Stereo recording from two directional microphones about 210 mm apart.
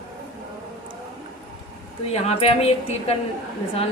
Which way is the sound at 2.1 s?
30° left (ahead or behind).